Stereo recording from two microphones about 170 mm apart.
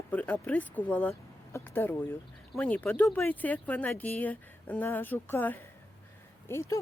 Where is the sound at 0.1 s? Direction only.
10° left (ahead or behind).